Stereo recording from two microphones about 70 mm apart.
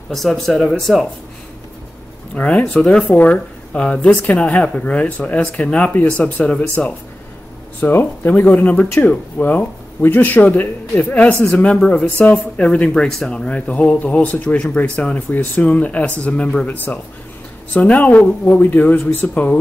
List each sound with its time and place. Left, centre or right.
0.1 s speech: centre
2.3 s speech: centre
3.1 s speech: left
3.7 s speech: centre
7.8 s speech: left